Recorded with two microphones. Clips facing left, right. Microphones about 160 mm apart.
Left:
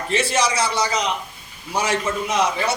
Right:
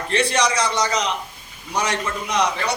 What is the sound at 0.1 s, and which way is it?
A man's voice, 5° left (ahead or behind).